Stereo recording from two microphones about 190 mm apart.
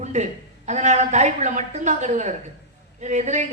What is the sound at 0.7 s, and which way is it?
A man's voice, 40° right (ahead or behind).